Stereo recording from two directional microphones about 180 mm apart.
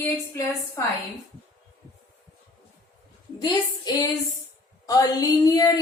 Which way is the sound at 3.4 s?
20° left (ahead or behind).